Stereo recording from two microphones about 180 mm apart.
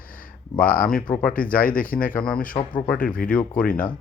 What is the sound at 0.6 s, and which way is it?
Speech, 50° left (ahead or behind).